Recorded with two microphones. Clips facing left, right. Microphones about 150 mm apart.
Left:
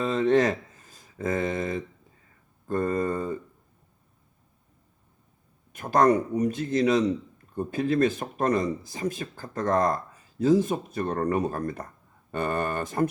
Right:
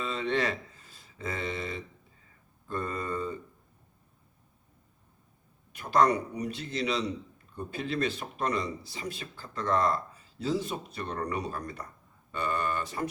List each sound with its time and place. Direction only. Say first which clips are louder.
0.0 s speech: left 8 dB; 45° left (ahead or behind)
2.6 s mantra: left 8 dB; 45° left (ahead or behind)
5.7 s speech: left 4 dB; 45° left (ahead or behind)